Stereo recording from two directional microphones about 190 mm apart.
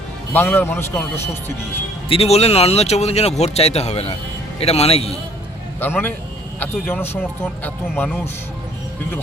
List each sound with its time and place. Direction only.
0.3 s a man's voice: 10° left (ahead or behind)
2.0 s speech: 30° left (ahead or behind)
5.8 s a man's voice: 10° left (ahead or behind)